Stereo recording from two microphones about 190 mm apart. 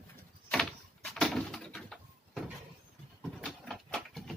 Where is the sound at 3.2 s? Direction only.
Centre (ahead or behind).